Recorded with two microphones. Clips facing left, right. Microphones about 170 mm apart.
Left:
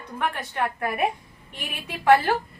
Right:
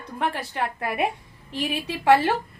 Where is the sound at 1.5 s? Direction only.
30° right (ahead or behind).